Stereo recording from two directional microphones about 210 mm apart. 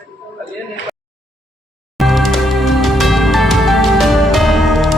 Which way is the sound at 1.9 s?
Centre (ahead or behind).